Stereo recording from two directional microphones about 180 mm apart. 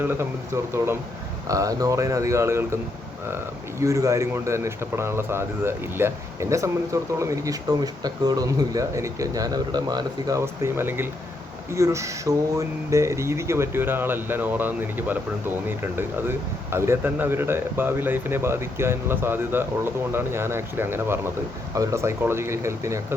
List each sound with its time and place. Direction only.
0.0 s speech: 15° right (ahead or behind)